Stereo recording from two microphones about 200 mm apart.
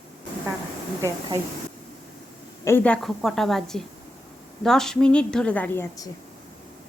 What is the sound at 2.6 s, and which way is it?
A woman's voice, 10° left (ahead or behind).